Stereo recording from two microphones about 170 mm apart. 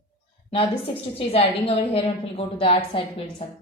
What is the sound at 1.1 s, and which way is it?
Speech, 35° left (ahead or behind).